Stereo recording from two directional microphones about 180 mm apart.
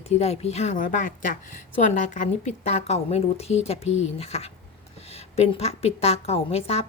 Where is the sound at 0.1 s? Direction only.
35° left (ahead or behind).